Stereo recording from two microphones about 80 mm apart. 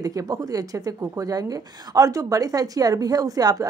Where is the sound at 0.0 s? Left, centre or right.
Right.